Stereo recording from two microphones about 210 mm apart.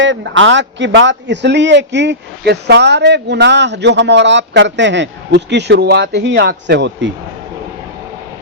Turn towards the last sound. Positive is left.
turn(degrees=-55)  # may be behind; listen again after turning